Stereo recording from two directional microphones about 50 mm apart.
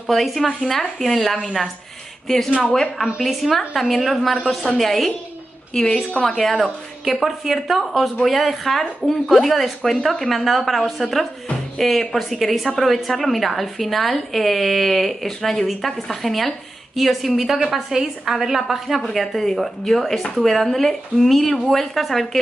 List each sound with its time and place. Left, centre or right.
0.0 s a woman's voice: centre
5.7 s a woman's voice: centre
6.5 s a woman's voice: centre